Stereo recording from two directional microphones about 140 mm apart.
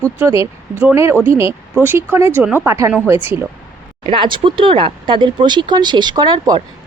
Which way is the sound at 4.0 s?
35° right (ahead or behind).